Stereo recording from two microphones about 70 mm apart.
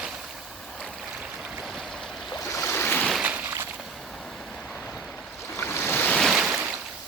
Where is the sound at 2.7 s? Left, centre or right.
Left.